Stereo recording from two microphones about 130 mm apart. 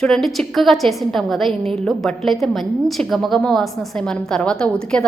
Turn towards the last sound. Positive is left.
turn(degrees=5)  # may be behind; listen again after turning